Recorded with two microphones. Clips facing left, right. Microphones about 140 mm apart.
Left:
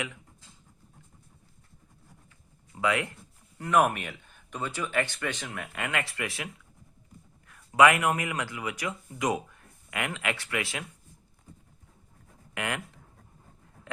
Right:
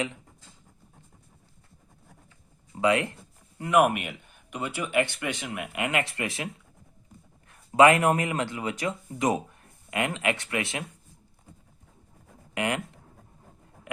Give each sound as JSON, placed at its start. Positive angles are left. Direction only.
{"t": 2.7, "sound": "speech", "side_deg": -25}
{"t": 12.5, "sound": "speech", "side_deg": -20}